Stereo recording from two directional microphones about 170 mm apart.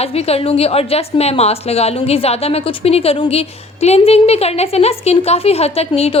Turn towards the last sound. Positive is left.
turn(degrees=35)  # may be behind; listen again after turning